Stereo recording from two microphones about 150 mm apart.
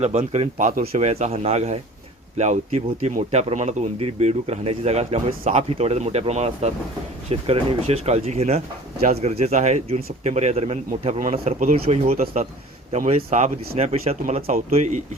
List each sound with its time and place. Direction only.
0.0 s speech: 50° right (ahead or behind)